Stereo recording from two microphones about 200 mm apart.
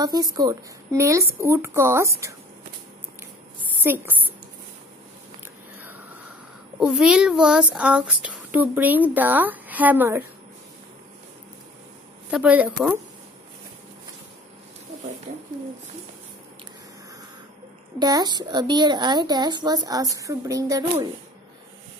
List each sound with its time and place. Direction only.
0.0 s a child's voice: 20° right (ahead or behind)
3.8 s a child's voice: 10° right (ahead or behind)
6.8 s a child's voice: 5° right (ahead or behind)
12.3 s a child's voice: 5° right (ahead or behind)
17.9 s a woman's voice: 20° right (ahead or behind)